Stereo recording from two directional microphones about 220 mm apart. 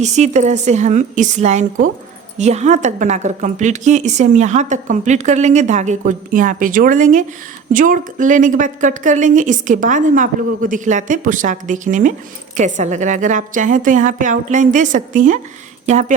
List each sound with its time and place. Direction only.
0.0 s a woman's voice: 30° right (ahead or behind)